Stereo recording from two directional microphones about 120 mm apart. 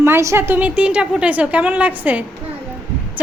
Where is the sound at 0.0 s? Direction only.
20° right (ahead or behind).